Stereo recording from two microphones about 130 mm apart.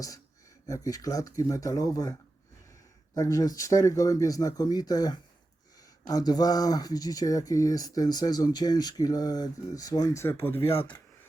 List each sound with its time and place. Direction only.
0.7 s speech: 25° left (ahead or behind)
3.2 s speech: 25° left (ahead or behind)
10.8 s speech: 40° left (ahead or behind)